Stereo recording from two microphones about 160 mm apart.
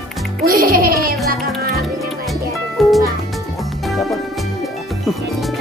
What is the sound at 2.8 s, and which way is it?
Music, centre (ahead or behind).